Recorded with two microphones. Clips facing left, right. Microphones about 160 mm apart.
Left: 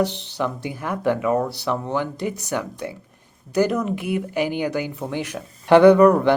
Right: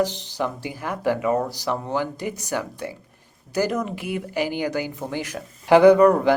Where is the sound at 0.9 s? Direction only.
55° left (ahead or behind).